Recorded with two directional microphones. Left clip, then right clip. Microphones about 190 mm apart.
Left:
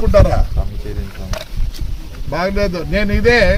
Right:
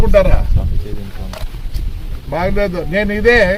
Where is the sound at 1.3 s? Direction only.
50° left (ahead or behind).